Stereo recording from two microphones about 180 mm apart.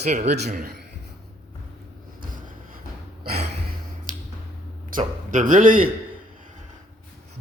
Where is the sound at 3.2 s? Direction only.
60° right (ahead or behind).